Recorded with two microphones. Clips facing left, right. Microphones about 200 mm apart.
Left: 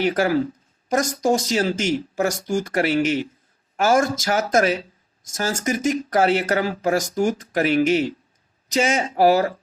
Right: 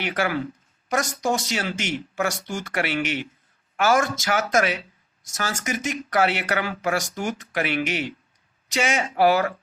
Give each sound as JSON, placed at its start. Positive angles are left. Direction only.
{"t": 0.0, "sound": "speech", "side_deg": 40}